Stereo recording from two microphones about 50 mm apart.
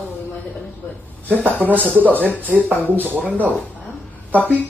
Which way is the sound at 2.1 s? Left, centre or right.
Left.